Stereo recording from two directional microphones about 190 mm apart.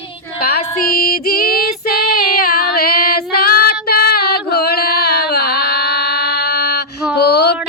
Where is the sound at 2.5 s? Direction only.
55° left (ahead or behind).